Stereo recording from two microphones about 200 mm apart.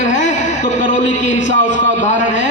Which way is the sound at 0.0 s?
40° left (ahead or behind).